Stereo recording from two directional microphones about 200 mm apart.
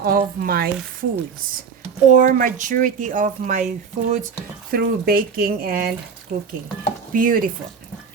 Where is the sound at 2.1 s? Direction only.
40° right (ahead or behind).